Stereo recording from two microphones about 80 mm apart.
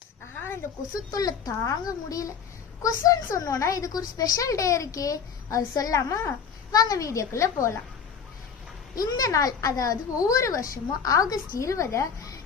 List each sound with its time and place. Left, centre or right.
0.3 s a sound: left
1.1 s a woman's voice: left
9.0 s a woman's voice: left